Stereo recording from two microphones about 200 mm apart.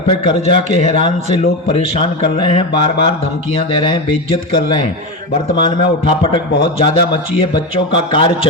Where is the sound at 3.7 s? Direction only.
25° left (ahead or behind).